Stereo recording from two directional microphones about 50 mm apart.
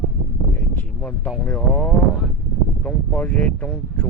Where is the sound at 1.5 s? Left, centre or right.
Left.